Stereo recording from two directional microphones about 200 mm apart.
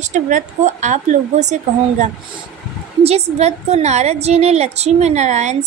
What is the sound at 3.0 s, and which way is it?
A woman's voice, 30° right (ahead or behind).